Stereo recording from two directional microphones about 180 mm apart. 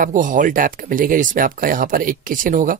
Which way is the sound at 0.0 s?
45° right (ahead or behind).